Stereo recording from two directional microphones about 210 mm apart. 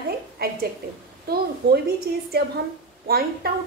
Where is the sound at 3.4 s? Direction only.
45° right (ahead or behind).